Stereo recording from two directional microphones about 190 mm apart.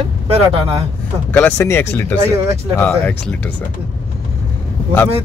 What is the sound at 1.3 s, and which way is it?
Speech, 10° left (ahead or behind).